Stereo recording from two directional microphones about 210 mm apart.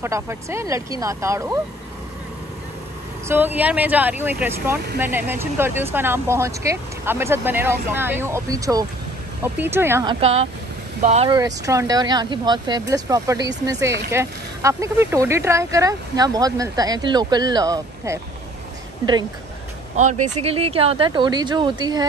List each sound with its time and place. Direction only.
0.0 s speech: 15° right (ahead or behind)
3.3 s speech: 10° right (ahead or behind)
10.2 s speech: 30° right (ahead or behind)
11.2 s speech: 15° right (ahead or behind)
20.0 s speech: 30° right (ahead or behind)